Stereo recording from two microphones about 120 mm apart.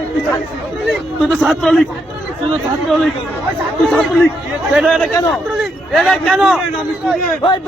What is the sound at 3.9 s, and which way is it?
A man's voice, 5° left (ahead or behind).